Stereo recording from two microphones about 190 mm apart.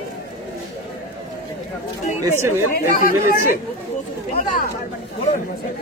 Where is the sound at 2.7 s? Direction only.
50° left (ahead or behind).